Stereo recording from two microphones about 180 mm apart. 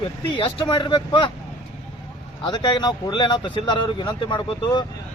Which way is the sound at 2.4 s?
25° left (ahead or behind).